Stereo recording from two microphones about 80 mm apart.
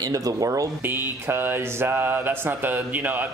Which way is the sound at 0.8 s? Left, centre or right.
Right.